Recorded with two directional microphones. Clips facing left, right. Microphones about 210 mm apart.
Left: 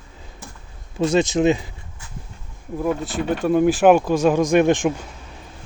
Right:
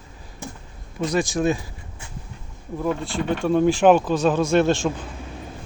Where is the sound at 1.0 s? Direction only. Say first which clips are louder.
Left 4 dB; 25° left (ahead or behind).